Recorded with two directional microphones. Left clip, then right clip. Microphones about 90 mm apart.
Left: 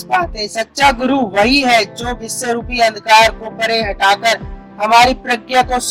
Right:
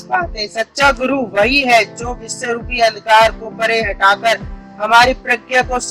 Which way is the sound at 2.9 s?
45° left (ahead or behind).